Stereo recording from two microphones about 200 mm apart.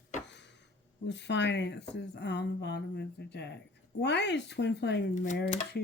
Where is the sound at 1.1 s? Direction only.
60° left (ahead or behind).